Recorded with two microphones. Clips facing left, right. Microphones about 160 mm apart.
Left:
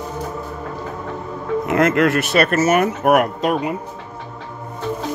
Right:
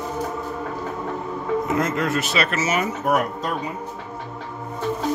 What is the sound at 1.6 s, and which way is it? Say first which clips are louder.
Speech: left 6 dB; 70° left (ahead or behind).